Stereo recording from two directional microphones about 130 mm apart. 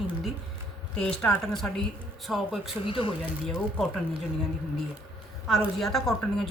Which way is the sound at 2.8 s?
40° left (ahead or behind).